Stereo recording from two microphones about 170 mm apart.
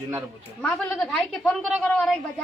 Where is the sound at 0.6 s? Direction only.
5° left (ahead or behind).